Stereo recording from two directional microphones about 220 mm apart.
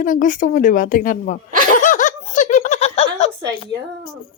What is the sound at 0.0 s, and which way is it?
A woman's voice, 35° left (ahead or behind).